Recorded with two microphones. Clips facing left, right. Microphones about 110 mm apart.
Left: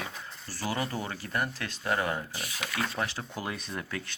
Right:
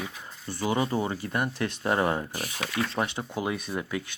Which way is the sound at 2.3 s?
45° right (ahead or behind).